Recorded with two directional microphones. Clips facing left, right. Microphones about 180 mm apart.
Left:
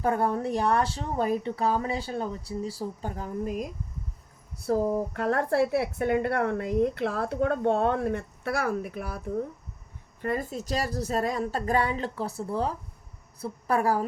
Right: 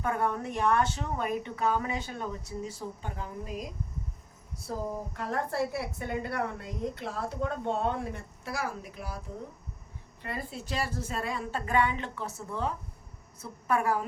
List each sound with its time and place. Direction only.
0.0 s speech: 35° left (ahead or behind); by 3.7 s 50° left (ahead or behind)
4.6 s a woman's voice: 65° left (ahead or behind)
10.2 s speech: 45° left (ahead or behind)